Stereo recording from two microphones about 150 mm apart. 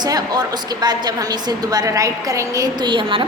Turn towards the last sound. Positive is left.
turn(degrees=-35)  # may be behind; listen again after turning